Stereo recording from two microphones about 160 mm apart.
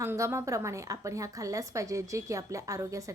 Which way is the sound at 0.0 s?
15° right (ahead or behind).